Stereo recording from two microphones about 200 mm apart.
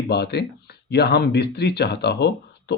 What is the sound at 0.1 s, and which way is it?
Speech, 55° left (ahead or behind).